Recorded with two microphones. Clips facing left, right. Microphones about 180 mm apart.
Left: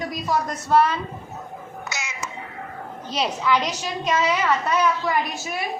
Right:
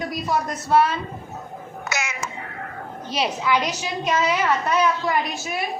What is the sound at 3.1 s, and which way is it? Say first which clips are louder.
A woman's voice: even; 5° right (ahead or behind).